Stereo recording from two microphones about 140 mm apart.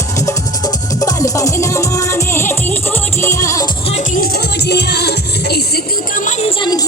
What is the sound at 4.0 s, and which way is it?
Music, 80° left.